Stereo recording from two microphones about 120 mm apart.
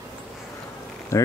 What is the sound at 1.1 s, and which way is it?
Speech, 25° left (ahead or behind).